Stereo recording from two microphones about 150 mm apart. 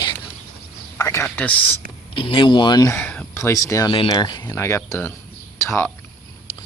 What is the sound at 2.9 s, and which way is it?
Speech, 10° left (ahead or behind).